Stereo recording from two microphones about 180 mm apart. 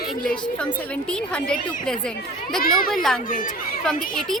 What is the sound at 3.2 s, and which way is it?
Speech, 50° left (ahead or behind).